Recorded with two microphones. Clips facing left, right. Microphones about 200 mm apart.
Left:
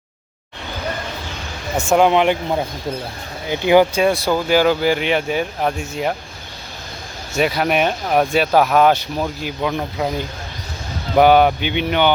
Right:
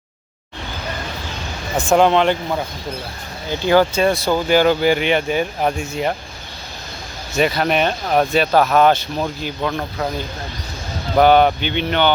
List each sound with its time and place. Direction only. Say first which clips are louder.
1.9 s speech: even; 10° left (ahead or behind)
4.3 s speech: right 1 dB; 5° left (ahead or behind)
7.3 s speech: even; 5° left (ahead or behind)